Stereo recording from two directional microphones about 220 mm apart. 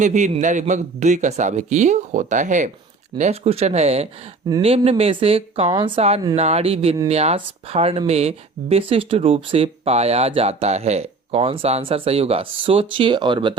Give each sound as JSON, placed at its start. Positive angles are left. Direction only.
{"t": 0.0, "sound": "a man's voice", "side_deg": -35}